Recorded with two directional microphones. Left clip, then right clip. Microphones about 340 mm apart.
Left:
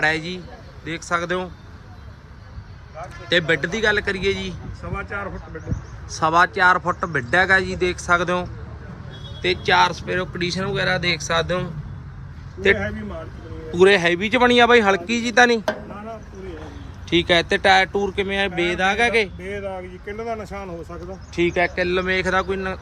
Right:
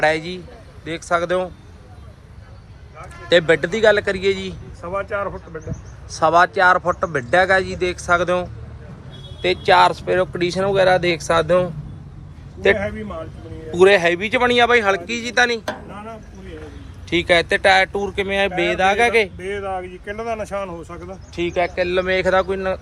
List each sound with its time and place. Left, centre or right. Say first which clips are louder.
0.0 s speech: right 3 dB; centre
3.2 s speech: right 4 dB; centre
6.1 s speech: right 3 dB; centre
13.7 s a man's voice: right 2 dB; centre
17.1 s speech: right 2 dB; centre
20.1 s speech: right 3 dB; right
21.3 s speech: even; centre